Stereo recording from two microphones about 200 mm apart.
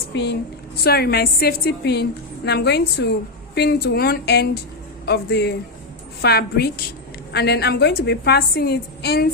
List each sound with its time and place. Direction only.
0.1 s a woman's voice: 60° left (ahead or behind)